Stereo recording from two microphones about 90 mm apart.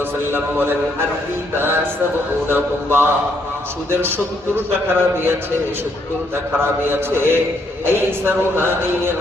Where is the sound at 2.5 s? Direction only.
25° right (ahead or behind).